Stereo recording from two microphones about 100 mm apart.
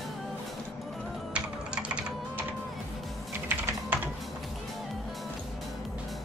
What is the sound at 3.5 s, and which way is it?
Typing, 20° right (ahead or behind).